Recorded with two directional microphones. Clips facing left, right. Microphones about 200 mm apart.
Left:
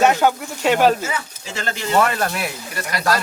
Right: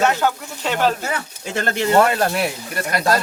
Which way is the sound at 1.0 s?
55° right (ahead or behind).